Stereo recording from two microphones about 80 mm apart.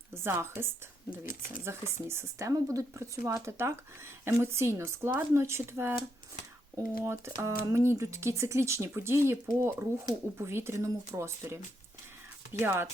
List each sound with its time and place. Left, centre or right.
0.1 s speech: right
12.6 s speech: right